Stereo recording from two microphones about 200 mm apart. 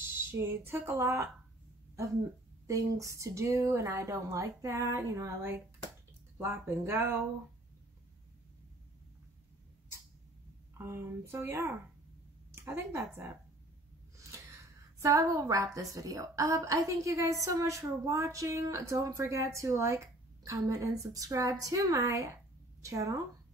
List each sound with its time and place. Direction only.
0.3 s a woman's voice: 10° right (ahead or behind)
2.6 s a woman's voice: 15° right (ahead or behind)
10.8 s a woman's voice: 10° right (ahead or behind)
15.0 s a woman's voice: 15° right (ahead or behind)